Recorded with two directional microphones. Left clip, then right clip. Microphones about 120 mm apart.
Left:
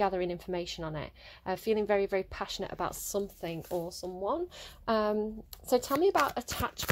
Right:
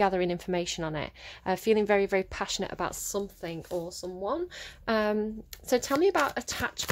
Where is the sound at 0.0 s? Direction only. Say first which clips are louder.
Right 4 dB; 15° right (ahead or behind).